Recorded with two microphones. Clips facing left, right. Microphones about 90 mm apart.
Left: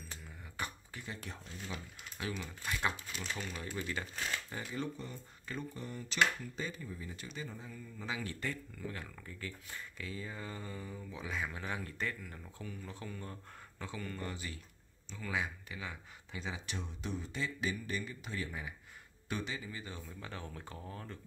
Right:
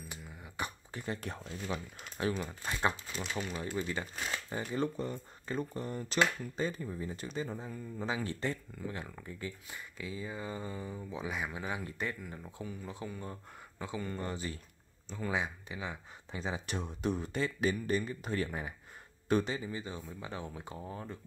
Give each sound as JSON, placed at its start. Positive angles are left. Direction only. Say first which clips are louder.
{"t": 0.1, "sound": "beatboxing", "louder": "right 3 dB", "side_deg": -15}
{"t": 1.0, "sound": "speech", "louder": "right 8 dB", "side_deg": -45}
{"t": 2.1, "sound": "speech", "louder": "right 7 dB", "side_deg": -35}
{"t": 4.7, "sound": "speech", "louder": "right 7 dB", "side_deg": -45}
{"t": 15.3, "sound": "speech", "louder": "even", "side_deg": -25}